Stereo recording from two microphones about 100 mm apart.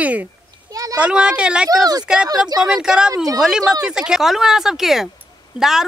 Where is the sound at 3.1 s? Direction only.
35° right (ahead or behind).